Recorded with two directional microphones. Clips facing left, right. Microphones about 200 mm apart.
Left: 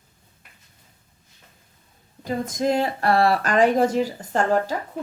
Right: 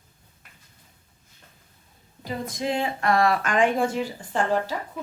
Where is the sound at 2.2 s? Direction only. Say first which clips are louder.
Left 5 dB; 45° left (ahead or behind).